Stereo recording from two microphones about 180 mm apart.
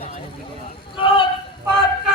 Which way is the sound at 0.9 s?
30° left (ahead or behind).